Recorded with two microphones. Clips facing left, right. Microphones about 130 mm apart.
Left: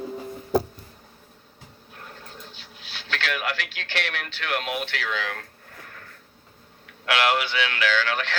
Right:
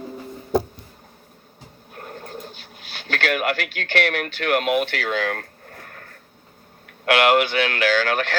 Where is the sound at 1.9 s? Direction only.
45° right (ahead or behind).